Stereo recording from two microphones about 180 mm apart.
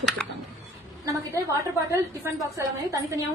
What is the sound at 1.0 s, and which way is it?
A woman's voice, 15° right (ahead or behind).